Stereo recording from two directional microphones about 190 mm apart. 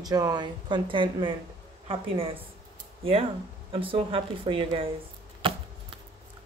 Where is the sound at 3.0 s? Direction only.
30° right (ahead or behind).